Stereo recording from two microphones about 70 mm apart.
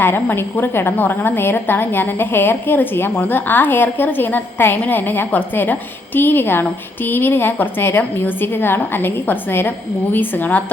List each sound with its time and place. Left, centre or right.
0.0 s a woman's voice: left